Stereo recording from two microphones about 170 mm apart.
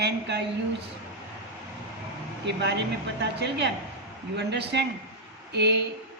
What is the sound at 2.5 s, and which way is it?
A woman's voice, 90° right.